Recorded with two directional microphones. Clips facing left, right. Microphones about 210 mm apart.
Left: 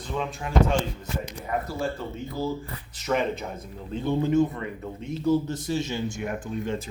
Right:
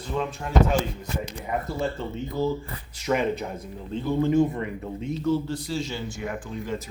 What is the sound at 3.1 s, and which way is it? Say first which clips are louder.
Speech: right 1 dB; 5° right (ahead or behind).